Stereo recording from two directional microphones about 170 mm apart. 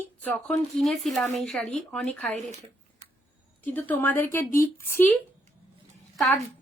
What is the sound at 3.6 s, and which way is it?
A woman's voice, 10° left (ahead or behind).